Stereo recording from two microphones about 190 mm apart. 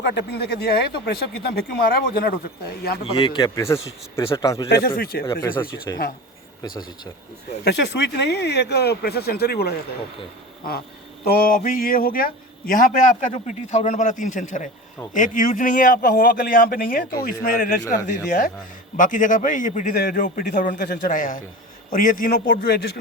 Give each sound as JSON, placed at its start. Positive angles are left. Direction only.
{"t": 0.0, "sound": "speech", "side_deg": 65}
{"t": 3.0, "sound": "a man's voice", "side_deg": 25}
{"t": 4.7, "sound": "a man's voice", "side_deg": 50}
{"t": 5.2, "sound": "a man's voice", "side_deg": 20}
{"t": 7.6, "sound": "speech", "side_deg": 65}
{"t": 11.3, "sound": "a man's voice", "side_deg": 50}